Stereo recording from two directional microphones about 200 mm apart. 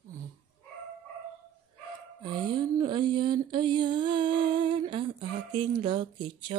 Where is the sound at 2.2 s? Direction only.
20° right (ahead or behind).